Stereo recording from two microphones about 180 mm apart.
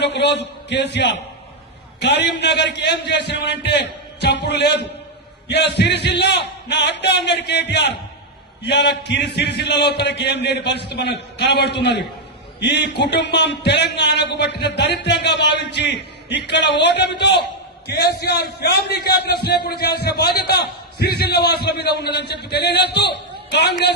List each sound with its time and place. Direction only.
0.0 s a man's voice: 70° left (ahead or behind)